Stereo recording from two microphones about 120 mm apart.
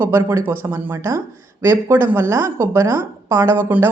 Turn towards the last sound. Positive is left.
turn(degrees=-20)  # may be behind; listen again after turning